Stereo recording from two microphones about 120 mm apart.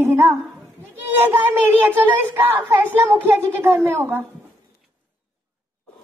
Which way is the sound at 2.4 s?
20° right (ahead or behind).